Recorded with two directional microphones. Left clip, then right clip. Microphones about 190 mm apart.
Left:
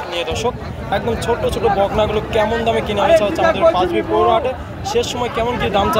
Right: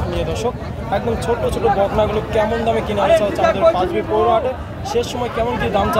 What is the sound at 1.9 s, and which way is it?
Speech, 10° right (ahead or behind).